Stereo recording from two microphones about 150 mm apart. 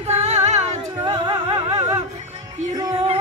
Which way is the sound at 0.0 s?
45° right (ahead or behind).